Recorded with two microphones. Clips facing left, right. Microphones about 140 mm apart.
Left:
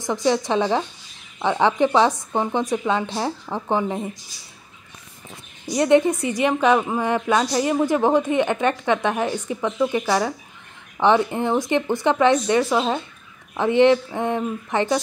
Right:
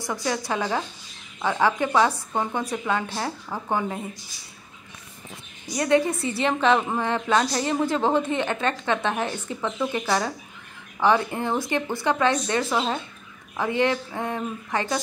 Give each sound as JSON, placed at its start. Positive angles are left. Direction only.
{"t": 0.0, "sound": "a woman's voice", "side_deg": 20}
{"t": 5.8, "sound": "a woman's voice", "side_deg": 20}